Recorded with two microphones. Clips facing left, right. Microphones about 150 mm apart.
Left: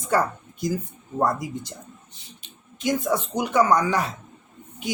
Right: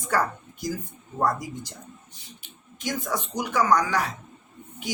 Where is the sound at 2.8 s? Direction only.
25° left (ahead or behind).